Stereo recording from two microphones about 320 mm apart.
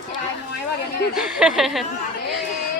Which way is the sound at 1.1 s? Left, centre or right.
Centre.